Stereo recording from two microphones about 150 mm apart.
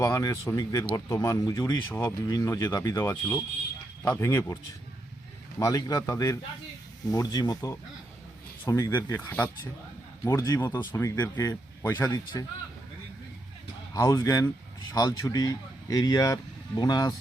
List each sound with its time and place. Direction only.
0.0 s speech: 20° left (ahead or behind)
1.9 s speech: 15° left (ahead or behind)
5.5 s speech: 20° left (ahead or behind)
13.9 s speech: 20° left (ahead or behind)